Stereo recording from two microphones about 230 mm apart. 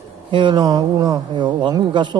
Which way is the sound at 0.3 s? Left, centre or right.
Right.